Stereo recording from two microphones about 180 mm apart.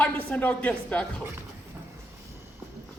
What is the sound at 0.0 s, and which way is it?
Speech, 10° left (ahead or behind).